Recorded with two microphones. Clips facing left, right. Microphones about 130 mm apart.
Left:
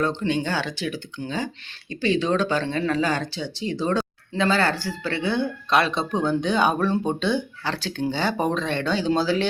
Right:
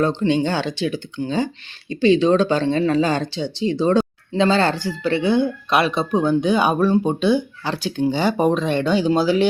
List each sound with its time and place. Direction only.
0.0 s speech: 25° right (ahead or behind)